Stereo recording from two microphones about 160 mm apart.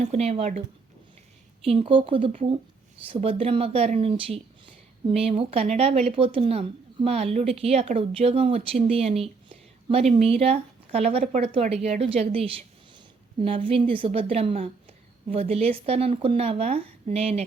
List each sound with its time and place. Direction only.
0.0 s speech: 40° right (ahead or behind)
1.6 s speech: 35° right (ahead or behind)